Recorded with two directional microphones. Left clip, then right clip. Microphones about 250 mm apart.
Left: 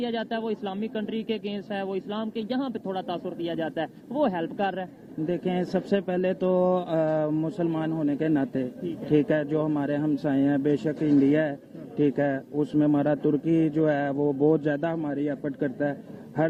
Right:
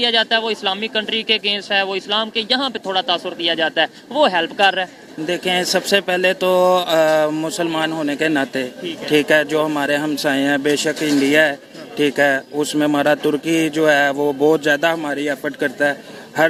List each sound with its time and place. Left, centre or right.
0.0 s a man's voice: centre
14.2 s speech: right
14.5 s a man's voice: centre